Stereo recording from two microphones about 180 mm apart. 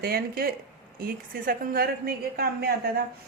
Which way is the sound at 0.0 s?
55° right (ahead or behind).